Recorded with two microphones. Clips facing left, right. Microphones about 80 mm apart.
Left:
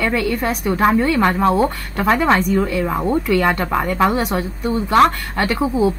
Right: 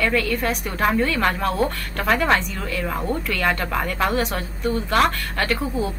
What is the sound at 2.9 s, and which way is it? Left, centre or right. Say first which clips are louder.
Speech: left 8 dB; left.